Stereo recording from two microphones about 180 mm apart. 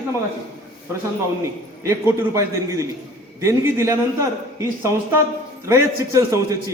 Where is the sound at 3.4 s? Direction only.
15° right (ahead or behind).